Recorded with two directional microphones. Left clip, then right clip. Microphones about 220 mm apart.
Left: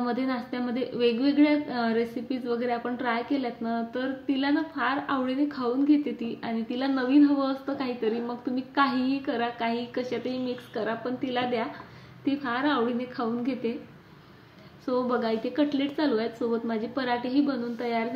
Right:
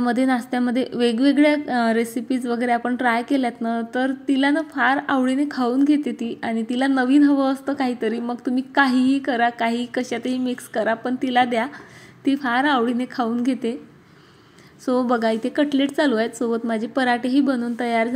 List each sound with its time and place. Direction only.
0.0 s a woman's voice: 45° right (ahead or behind)
14.9 s a woman's voice: 45° right (ahead or behind)